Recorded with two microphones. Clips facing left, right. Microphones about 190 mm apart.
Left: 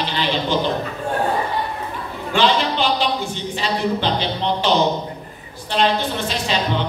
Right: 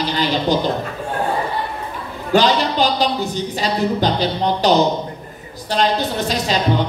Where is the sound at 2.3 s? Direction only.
40° right (ahead or behind).